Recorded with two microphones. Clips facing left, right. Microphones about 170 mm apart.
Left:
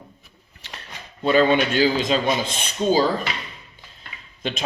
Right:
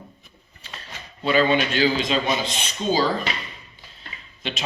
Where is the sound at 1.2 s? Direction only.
45° left (ahead or behind).